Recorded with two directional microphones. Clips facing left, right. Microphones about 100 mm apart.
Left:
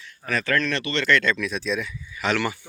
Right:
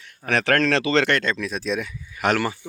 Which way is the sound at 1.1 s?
35° right (ahead or behind).